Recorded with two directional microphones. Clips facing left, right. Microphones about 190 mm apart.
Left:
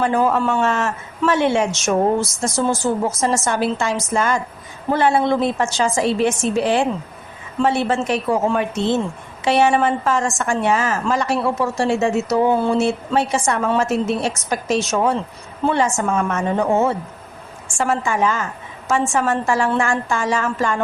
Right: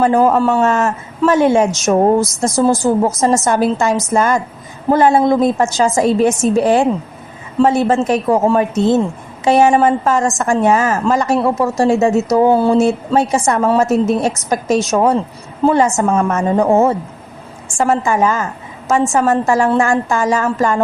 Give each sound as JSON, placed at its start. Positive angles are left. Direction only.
{"t": 0.0, "sound": "a woman's voice", "side_deg": -40}